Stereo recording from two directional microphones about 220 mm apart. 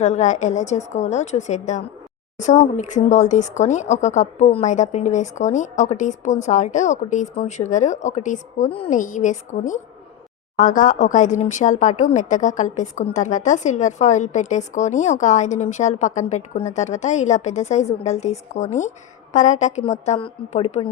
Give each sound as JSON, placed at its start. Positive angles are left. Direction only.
{"t": 0.0, "sound": "speech", "side_deg": 30}